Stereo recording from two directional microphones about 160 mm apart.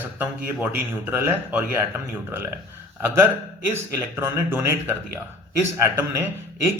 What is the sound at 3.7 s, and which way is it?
A man's voice, 15° right (ahead or behind).